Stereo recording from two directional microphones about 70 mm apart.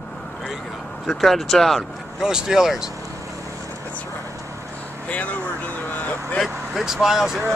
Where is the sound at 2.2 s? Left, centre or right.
Centre.